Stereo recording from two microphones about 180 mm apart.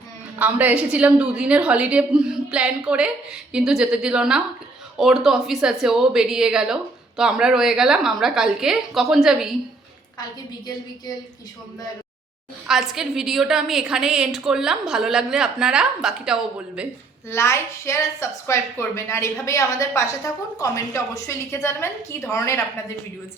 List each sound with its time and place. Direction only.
0.3 s a woman's voice: 10° right (ahead or behind)
12.6 s a woman's voice: 5° right (ahead or behind)
17.2 s a woman's voice: 15° left (ahead or behind)